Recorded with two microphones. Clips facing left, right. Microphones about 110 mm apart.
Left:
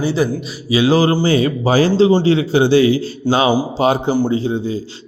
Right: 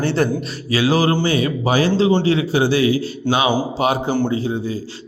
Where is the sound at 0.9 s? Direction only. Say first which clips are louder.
Left 3 dB; 30° left (ahead or behind).